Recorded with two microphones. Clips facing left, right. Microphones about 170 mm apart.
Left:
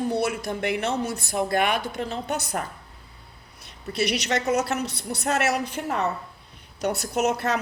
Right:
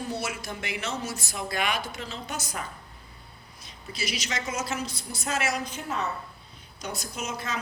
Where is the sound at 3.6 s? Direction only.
65° left (ahead or behind).